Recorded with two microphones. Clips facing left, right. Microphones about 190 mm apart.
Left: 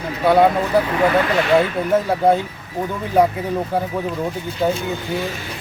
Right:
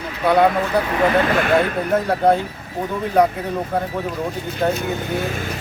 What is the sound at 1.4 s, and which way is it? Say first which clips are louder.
Speech: left 1 dB; 50° right (ahead or behind).